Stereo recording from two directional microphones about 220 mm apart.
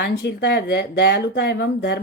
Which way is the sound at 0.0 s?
50° left (ahead or behind).